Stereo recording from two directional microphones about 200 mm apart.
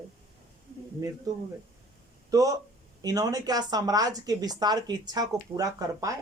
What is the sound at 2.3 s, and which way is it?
Speech, 15° right (ahead or behind).